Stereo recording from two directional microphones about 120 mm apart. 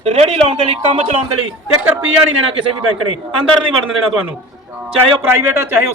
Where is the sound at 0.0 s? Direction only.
60° right (ahead or behind).